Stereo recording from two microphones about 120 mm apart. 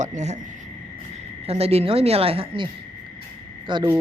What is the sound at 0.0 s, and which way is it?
Speech, 80° right.